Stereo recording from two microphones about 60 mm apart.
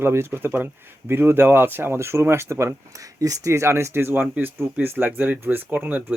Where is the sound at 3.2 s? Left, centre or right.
Right.